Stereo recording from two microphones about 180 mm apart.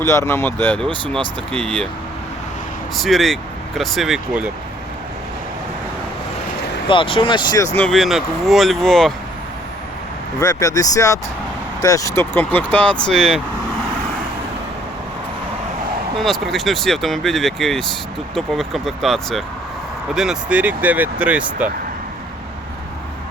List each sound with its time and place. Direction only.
0.0 s speech: 15° left (ahead or behind)
2.9 s speech: centre (ahead or behind)
6.8 s speech: 30° left (ahead or behind)
7.8 s speech: 5° left (ahead or behind)
10.4 s speech: 20° left (ahead or behind)
16.1 s speech: centre (ahead or behind)